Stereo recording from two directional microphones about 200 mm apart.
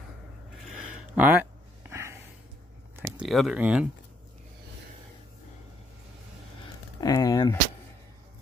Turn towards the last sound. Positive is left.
turn(degrees=20)  # may be behind; listen again after turning